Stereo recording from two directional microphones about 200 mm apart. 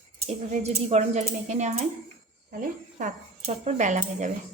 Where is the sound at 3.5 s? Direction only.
35° right (ahead or behind).